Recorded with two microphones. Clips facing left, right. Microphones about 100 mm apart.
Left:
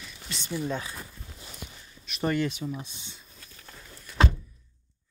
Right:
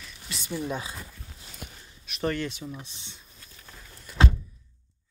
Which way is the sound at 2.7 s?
10° left (ahead or behind).